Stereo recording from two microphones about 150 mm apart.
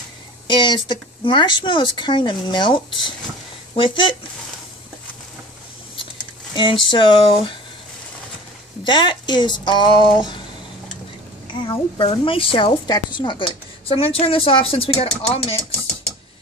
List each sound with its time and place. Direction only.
0.5 s a woman's voice: 30° left (ahead or behind)
6.5 s a woman's voice: 30° left (ahead or behind)
8.8 s speech: 30° left (ahead or behind)
11.5 s a woman's voice: 30° left (ahead or behind)